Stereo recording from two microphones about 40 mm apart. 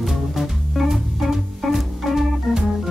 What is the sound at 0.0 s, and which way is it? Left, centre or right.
Music, centre.